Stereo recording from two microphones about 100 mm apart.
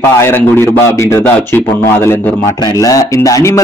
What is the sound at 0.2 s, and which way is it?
Speech, 25° left (ahead or behind).